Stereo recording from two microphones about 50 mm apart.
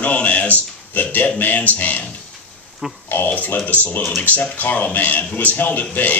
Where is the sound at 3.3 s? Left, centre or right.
Left.